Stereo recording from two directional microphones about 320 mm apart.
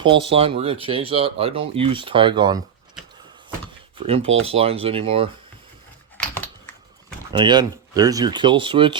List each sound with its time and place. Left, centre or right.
0.0 s speech: centre
4.0 s speech: centre
7.3 s speech: centre